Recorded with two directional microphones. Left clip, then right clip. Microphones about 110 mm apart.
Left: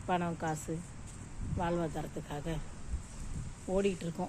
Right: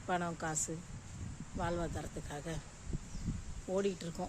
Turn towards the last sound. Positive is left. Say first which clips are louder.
# left 3 dB
turn(degrees=-15)  # may be behind; listen again after turning